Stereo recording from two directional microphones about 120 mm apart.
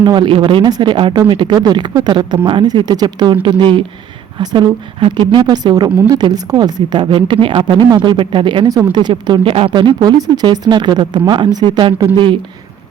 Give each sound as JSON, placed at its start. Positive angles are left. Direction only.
{"t": 0.0, "sound": "a woman's voice", "side_deg": -40}